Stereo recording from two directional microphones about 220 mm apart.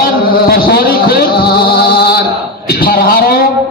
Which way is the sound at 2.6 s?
40° left (ahead or behind).